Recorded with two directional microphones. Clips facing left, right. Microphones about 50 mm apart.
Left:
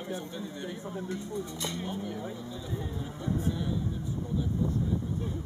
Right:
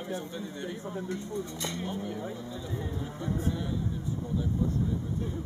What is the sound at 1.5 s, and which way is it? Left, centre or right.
Speech, right.